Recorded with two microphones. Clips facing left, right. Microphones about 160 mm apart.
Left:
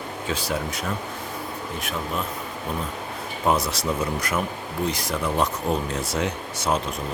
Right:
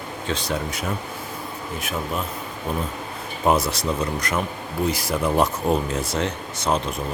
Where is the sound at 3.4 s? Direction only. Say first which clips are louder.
Right 2 dB; 5° right (ahead or behind).